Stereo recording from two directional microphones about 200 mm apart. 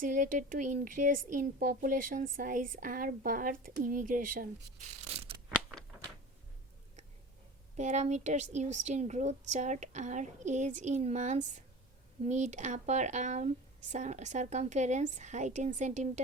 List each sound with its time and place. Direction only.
0.0 s speech: 40° right (ahead or behind)
7.8 s speech: 35° right (ahead or behind)